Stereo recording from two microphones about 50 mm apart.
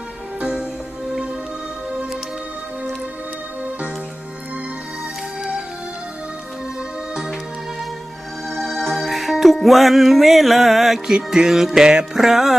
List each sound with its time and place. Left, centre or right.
0.3 s music: right
5.4 s music: centre
8.4 s music: centre